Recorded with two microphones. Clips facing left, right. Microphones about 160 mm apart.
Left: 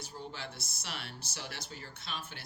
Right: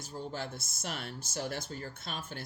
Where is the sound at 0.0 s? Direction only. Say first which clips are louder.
Right 5 dB; 45° right (ahead or behind).